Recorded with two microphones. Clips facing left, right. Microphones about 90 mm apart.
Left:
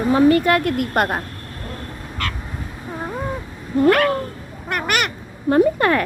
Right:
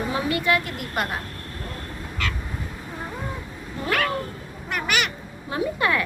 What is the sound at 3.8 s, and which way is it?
Speech, 50° left (ahead or behind).